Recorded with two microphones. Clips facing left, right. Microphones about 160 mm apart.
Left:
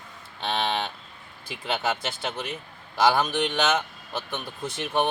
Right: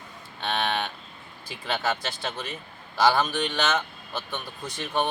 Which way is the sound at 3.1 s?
15° left (ahead or behind).